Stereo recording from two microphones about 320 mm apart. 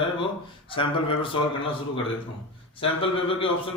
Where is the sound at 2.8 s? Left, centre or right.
Centre.